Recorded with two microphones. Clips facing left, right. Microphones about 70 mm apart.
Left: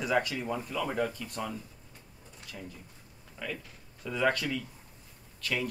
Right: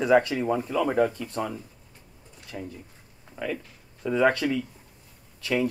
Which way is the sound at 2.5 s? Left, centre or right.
Right.